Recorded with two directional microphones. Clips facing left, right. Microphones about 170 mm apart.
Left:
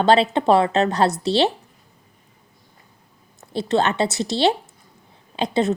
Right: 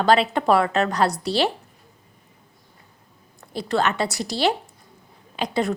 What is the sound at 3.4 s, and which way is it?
A woman's voice, 25° left (ahead or behind).